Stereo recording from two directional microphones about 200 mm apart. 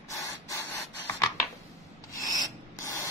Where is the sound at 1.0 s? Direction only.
15° left (ahead or behind).